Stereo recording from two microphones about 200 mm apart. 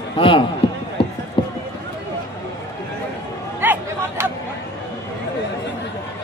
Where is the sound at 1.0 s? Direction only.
25° left (ahead or behind).